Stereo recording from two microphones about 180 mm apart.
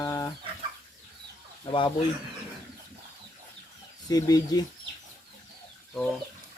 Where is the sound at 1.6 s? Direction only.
25° left (ahead or behind).